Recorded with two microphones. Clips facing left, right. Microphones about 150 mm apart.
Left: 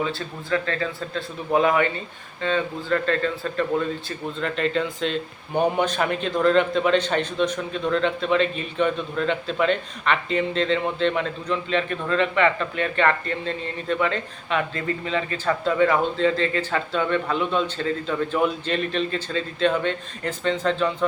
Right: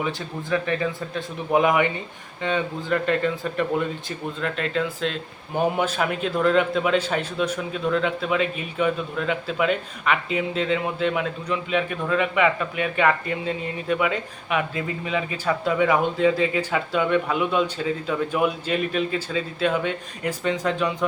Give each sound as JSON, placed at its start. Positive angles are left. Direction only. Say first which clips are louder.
{"t": 0.5, "sound": "a man's voice", "louder": "right 1 dB", "side_deg": -15}
{"t": 4.4, "sound": "a man's voice", "louder": "left 2 dB", "side_deg": -5}